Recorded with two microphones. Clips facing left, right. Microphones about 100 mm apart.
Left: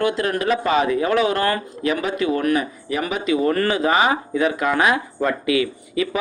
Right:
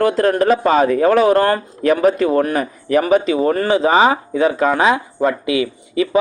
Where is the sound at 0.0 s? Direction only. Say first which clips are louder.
Right 6 dB; 40° right (ahead or behind).